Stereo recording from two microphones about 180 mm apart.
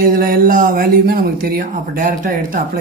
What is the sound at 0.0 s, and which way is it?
Speech, 50° right (ahead or behind).